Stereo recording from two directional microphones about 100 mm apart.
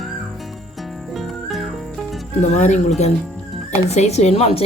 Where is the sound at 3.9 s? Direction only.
90° left.